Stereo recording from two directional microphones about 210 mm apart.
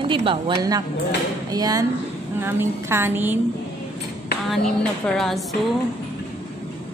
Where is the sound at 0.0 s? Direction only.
25° right (ahead or behind); by 3.3 s 10° right (ahead or behind).